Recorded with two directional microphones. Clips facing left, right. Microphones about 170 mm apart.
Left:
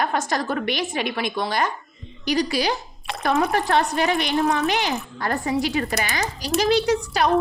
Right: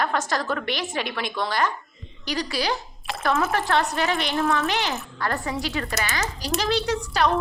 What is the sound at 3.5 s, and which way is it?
A woman's voice, 15° left (ahead or behind).